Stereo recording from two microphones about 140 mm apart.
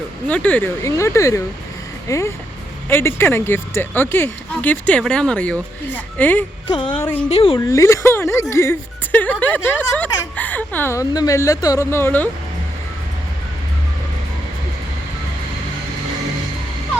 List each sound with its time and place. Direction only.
0.3 s speech: 10° left (ahead or behind)
6.7 s speech: 35° left (ahead or behind)
6.9 s speech: 15° left (ahead or behind)
7.3 s speech: 45° left (ahead or behind)
7.7 s speech: 20° left (ahead or behind)